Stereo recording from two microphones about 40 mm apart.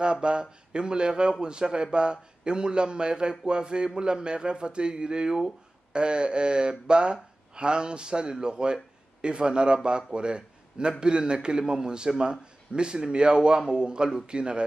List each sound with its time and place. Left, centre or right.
0.0 s a man's voice: right